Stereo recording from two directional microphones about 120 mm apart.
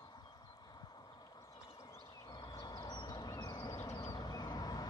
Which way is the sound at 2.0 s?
40° left (ahead or behind).